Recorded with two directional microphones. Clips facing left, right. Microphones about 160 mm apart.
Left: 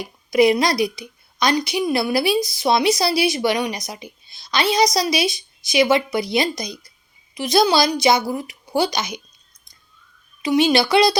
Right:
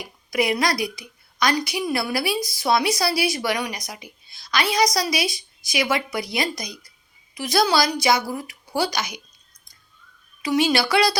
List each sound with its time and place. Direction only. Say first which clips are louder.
0.0 s a woman's voice: left 8 dB; 25° left (ahead or behind)
10.4 s a woman's voice: left 4 dB; 20° left (ahead or behind)